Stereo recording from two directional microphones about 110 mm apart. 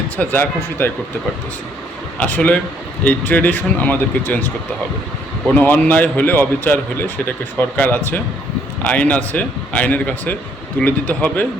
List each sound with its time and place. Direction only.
0.2 s a man's voice: 15° left (ahead or behind)
2.1 s a man's voice: 15° left (ahead or behind)
5.5 s a man's voice: 15° left (ahead or behind)